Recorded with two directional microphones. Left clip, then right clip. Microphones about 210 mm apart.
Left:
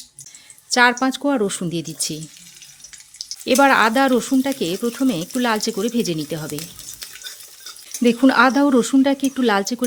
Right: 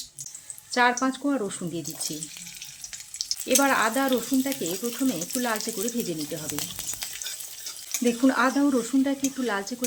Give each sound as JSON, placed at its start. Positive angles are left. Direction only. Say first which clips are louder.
{"t": 0.7, "sound": "speech", "louder": "left 7 dB", "side_deg": 55}
{"t": 3.4, "sound": "speech", "louder": "left 8 dB", "side_deg": 55}
{"t": 8.0, "sound": "speech", "louder": "left 8 dB", "side_deg": 55}